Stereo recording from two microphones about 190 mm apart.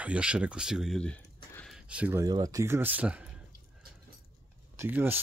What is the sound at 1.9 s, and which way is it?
Speech, 10° right (ahead or behind).